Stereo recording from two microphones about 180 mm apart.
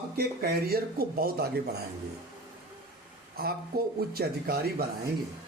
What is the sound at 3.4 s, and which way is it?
Speech, 60° right (ahead or behind).